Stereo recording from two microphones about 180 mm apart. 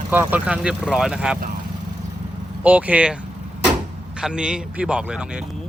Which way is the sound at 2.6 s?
10° right (ahead or behind).